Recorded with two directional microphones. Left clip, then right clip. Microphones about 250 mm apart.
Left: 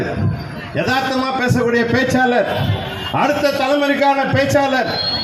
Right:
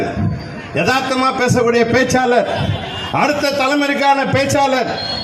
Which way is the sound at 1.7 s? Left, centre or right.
Right.